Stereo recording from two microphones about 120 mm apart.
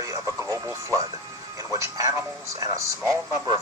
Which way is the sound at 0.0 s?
25° right (ahead or behind).